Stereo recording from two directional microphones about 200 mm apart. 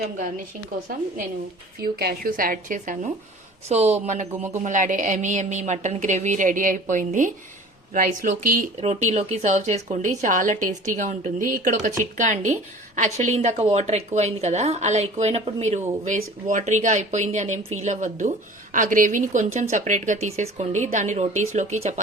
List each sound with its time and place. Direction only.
1.8 s a woman's voice: 50° right (ahead or behind)
4.3 s a man's voice: 10° right (ahead or behind)
4.6 s a woman's voice: 40° right (ahead or behind)